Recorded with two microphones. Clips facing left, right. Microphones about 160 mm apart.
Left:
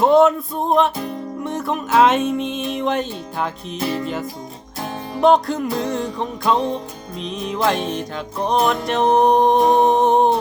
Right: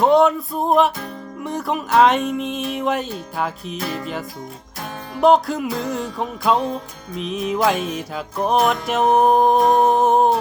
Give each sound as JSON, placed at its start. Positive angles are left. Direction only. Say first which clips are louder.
{"t": 0.0, "sound": "music", "louder": "left 1 dB", "side_deg": 0}
{"t": 3.8, "sound": "music", "louder": "left 5 dB", "side_deg": 30}
{"t": 4.0, "sound": "music", "louder": "left 3 dB", "side_deg": 0}